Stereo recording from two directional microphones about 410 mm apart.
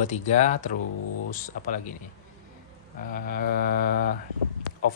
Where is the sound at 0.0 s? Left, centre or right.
Centre.